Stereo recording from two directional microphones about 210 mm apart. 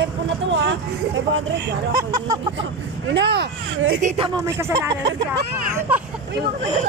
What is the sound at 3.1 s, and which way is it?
Speech, 55° right (ahead or behind).